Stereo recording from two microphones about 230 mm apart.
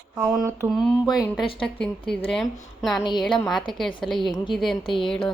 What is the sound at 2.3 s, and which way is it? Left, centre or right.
Speech, centre.